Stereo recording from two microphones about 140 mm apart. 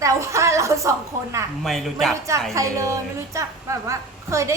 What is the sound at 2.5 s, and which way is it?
A woman's voice, 20° right (ahead or behind).